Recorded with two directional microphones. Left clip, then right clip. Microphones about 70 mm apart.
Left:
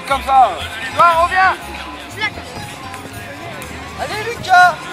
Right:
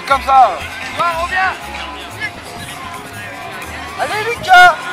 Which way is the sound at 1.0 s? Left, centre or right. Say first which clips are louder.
Left 5 dB; left.